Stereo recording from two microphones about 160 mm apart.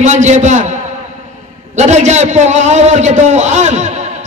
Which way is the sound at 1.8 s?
45° right (ahead or behind).